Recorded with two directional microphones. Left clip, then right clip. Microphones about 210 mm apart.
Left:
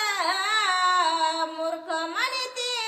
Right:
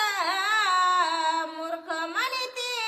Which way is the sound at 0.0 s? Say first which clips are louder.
Even; 15° right (ahead or behind).